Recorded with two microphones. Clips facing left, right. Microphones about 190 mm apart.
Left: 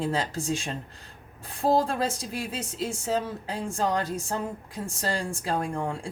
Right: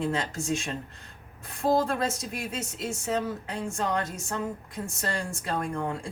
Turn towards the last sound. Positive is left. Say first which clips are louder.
# left 1 dB
turn(degrees=30)  # may be behind; listen again after turning